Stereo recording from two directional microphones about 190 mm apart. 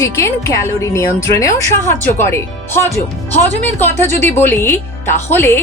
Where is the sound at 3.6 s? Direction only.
10° left (ahead or behind).